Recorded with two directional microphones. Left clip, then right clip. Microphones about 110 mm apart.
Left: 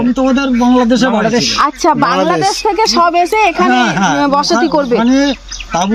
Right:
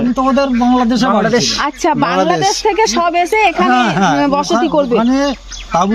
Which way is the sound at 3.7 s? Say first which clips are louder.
Even; 30° right (ahead or behind).